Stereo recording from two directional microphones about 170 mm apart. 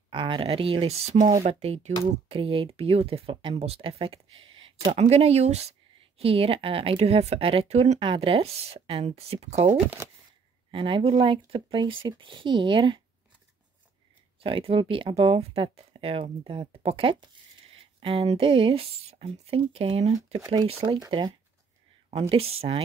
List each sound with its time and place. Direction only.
0.1 s speech: 30° right (ahead or behind)
14.4 s speech: 35° right (ahead or behind)
22.3 s speech: 35° right (ahead or behind)